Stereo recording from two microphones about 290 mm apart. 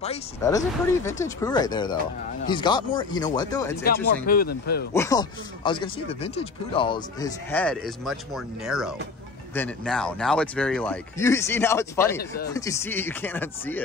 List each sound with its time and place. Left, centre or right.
0.0 s speech: centre
3.8 s speech: left
4.9 s speech: centre